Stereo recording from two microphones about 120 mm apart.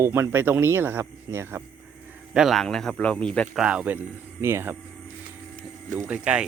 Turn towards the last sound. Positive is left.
turn(degrees=-10)  # may be behind; listen again after turning